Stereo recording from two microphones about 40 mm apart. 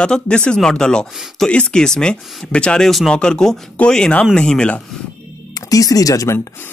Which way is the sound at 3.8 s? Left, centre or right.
Left.